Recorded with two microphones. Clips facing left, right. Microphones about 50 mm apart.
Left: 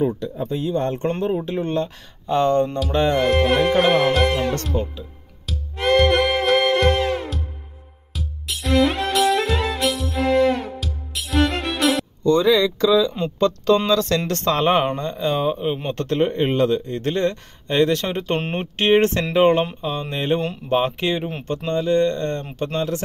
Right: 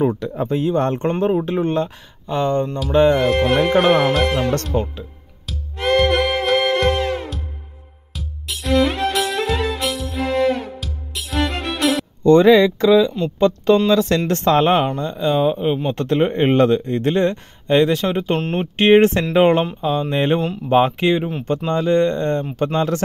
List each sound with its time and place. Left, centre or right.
0.1 s speech: right
1.4 s speech: right
2.2 s speech: centre
5.5 s music: centre
12.2 s speech: right
15.0 s speech: centre
15.9 s speech: right
18.0 s speech: centre
18.8 s speech: right
20.3 s speech: centre
20.7 s speech: right
21.7 s speech: right